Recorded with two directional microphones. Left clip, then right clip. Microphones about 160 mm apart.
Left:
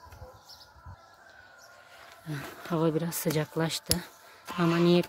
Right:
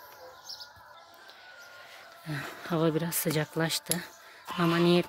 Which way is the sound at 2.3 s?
5° left (ahead or behind).